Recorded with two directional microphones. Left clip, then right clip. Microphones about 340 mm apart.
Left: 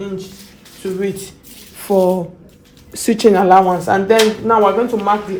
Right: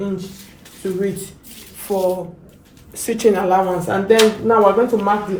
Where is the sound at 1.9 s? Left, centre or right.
Left.